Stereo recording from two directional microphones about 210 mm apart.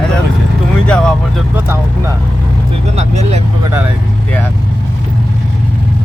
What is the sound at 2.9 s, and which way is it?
Vehicle, 30° right (ahead or behind).